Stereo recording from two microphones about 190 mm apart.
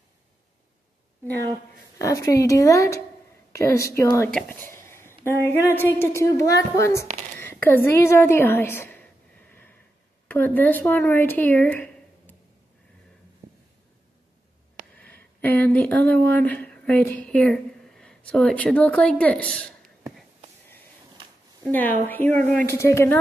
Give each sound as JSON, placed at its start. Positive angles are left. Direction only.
{"t": 2.0, "sound": "a woman's voice", "side_deg": 15}
{"t": 4.3, "sound": "speech", "side_deg": 5}
{"t": 7.3, "sound": "a sound", "side_deg": 10}
{"t": 10.2, "sound": "speech", "side_deg": 10}
{"t": 15.0, "sound": "speech", "side_deg": 10}
{"t": 21.6, "sound": "a woman's voice", "side_deg": 10}